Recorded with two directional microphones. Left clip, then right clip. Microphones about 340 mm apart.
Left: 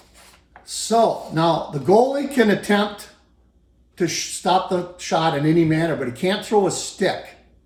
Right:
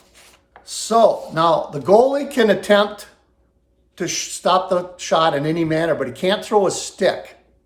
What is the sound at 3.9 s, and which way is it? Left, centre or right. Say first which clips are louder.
Speech: left 1 dB; centre.